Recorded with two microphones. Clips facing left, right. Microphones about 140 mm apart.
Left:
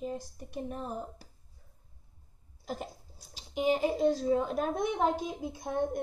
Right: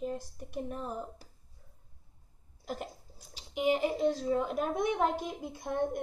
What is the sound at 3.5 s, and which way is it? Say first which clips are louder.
Speech: left 1 dB; 35° left (ahead or behind).